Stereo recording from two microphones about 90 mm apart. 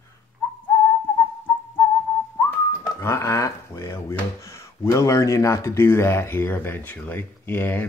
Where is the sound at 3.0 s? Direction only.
35° left (ahead or behind).